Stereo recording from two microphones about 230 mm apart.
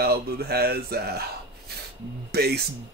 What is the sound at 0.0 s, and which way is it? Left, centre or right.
Speech, right.